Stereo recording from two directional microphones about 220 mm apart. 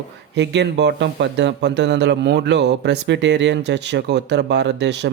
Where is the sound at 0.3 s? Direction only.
50° right (ahead or behind).